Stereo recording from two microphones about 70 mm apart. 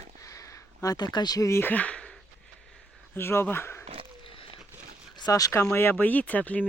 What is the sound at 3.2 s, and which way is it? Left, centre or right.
Speech, left.